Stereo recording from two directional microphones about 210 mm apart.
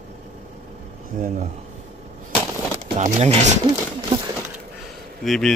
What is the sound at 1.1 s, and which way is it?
Speech, 40° right (ahead or behind).